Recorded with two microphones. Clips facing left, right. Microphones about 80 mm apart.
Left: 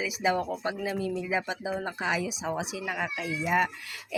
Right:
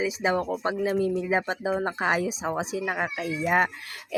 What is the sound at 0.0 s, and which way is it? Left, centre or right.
Speech, right.